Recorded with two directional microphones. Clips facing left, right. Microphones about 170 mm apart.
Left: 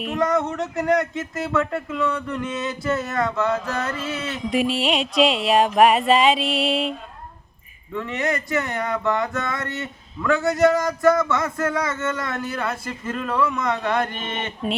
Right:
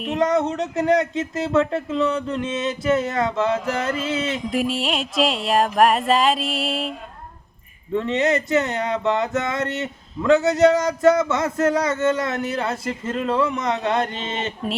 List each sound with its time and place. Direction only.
0.0 s speech: 20° right (ahead or behind)
4.5 s music: centre (ahead or behind)
7.9 s speech: 25° right (ahead or behind)